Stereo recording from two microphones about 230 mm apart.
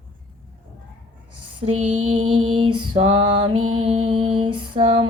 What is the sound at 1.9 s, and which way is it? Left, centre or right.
Music, right.